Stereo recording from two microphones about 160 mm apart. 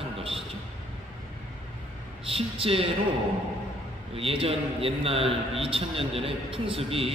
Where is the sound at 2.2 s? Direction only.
35° right (ahead or behind).